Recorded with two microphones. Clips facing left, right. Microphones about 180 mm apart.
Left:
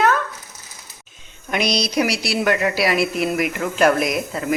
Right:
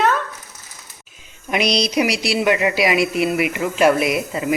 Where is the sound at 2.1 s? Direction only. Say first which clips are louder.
Right 2 dB; 35° left (ahead or behind).